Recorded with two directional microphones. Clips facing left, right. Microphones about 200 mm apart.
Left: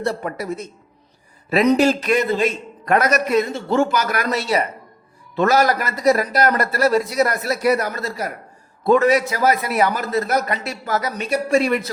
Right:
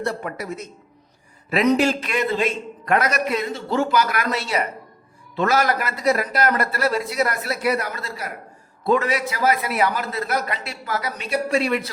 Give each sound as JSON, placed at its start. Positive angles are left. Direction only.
{"t": 0.0, "sound": "a man's voice", "side_deg": 35}